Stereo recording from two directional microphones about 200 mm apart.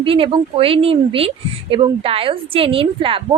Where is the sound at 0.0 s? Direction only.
25° right (ahead or behind).